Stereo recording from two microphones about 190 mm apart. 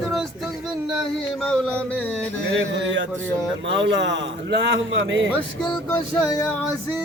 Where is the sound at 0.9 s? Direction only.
5° left (ahead or behind).